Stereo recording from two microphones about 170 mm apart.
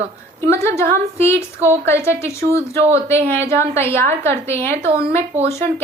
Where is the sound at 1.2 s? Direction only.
15° left (ahead or behind).